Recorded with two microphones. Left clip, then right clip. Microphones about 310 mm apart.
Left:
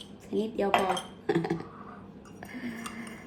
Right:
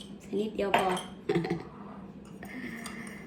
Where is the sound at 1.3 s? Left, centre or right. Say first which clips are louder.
Left 1 dB; left.